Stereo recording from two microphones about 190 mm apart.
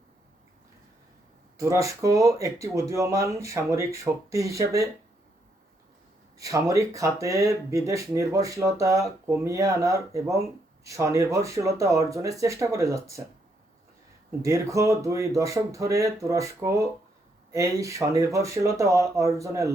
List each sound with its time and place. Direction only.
1.5 s speech: 15° right (ahead or behind)
6.4 s speech: 15° right (ahead or behind)
14.3 s speech: 15° right (ahead or behind)